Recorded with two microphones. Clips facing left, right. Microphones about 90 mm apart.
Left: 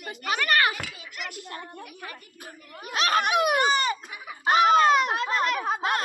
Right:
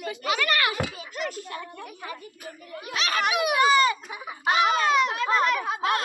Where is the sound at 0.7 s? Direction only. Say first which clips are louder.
Right 7 dB; 30° right (ahead or behind).